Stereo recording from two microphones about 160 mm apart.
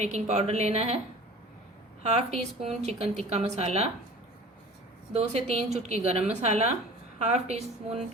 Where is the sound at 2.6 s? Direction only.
40° right (ahead or behind).